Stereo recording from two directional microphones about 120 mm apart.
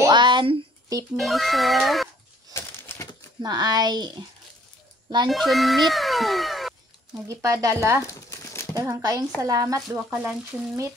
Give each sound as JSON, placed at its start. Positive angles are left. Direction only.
{"t": 0.1, "sound": "a sound", "side_deg": -40}
{"t": 1.1, "sound": "speech", "side_deg": 0}
{"t": 2.5, "sound": "a sound", "side_deg": 25}
{"t": 3.4, "sound": "speech", "side_deg": -35}
{"t": 5.3, "sound": "speech", "side_deg": 0}
{"t": 7.2, "sound": "speech", "side_deg": -25}
{"t": 8.1, "sound": "crumpling", "side_deg": 25}
{"t": 8.7, "sound": "speech", "side_deg": -30}
{"t": 10.0, "sound": "speech", "side_deg": -10}